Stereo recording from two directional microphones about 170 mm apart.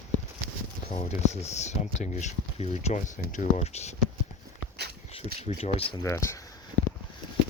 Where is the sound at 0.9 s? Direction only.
40° left (ahead or behind).